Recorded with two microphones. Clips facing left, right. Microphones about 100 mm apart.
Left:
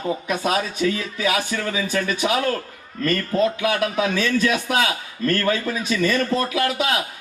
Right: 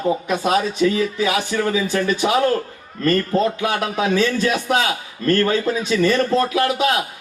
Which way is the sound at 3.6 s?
30° right (ahead or behind).